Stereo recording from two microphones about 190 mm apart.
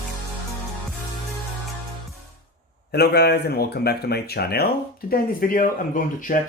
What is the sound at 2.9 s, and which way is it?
Speech, 60° left (ahead or behind).